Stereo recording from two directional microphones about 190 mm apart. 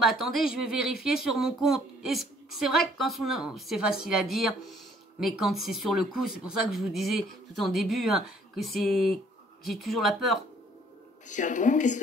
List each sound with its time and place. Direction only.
0.0 s speech: centre (ahead or behind)
11.2 s a woman's voice: 40° left (ahead or behind)